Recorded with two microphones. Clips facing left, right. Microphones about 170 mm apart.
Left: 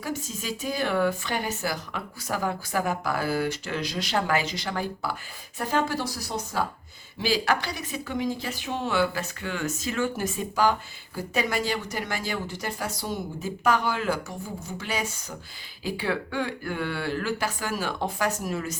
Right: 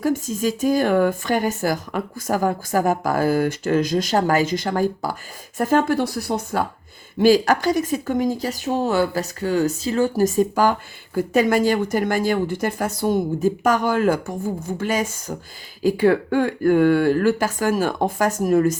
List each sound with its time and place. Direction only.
0.0 s speech: 50° right (ahead or behind)